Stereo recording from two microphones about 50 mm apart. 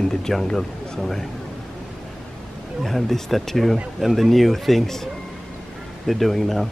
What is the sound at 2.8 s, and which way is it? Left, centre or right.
Speech, centre.